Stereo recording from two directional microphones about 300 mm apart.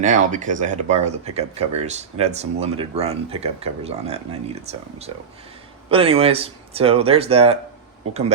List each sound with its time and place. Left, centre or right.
0.0 s speech: right